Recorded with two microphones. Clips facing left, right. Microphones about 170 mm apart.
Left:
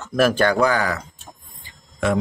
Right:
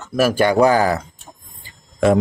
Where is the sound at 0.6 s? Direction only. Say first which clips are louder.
Right 5 dB; 30° right (ahead or behind).